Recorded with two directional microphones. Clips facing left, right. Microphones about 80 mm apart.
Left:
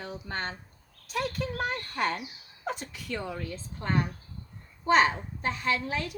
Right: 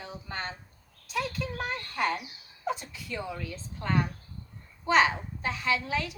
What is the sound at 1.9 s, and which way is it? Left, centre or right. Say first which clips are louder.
A woman's voice: right 2 dB; left.